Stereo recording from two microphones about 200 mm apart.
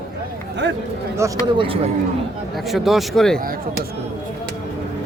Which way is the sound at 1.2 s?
15° right (ahead or behind).